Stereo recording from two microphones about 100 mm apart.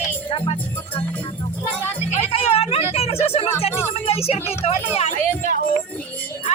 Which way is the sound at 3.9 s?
80° left.